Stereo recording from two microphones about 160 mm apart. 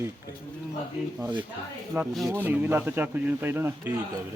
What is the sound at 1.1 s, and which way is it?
Speech, 5° right (ahead or behind).